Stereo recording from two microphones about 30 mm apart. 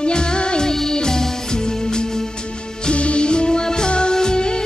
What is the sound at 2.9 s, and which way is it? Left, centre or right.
Music, left.